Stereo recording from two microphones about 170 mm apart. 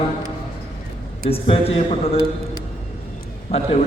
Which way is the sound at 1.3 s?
35° left (ahead or behind).